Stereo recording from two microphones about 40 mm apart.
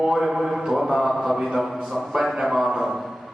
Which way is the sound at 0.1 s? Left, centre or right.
Centre.